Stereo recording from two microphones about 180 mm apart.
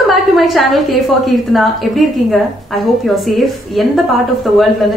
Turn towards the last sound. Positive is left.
turn(degrees=0)  # may be behind; listen again after turning